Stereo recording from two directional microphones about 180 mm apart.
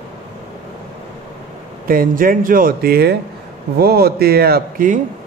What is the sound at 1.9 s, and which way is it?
A man's voice, 50° right (ahead or behind).